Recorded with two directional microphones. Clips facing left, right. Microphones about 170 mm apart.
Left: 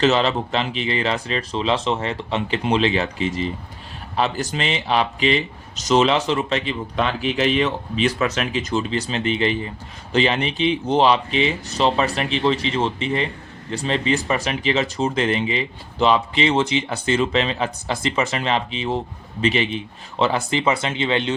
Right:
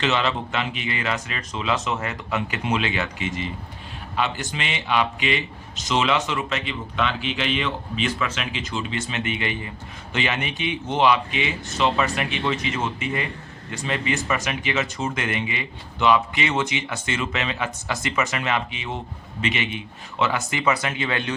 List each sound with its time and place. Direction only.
0.0 s speech: 35° left (ahead or behind)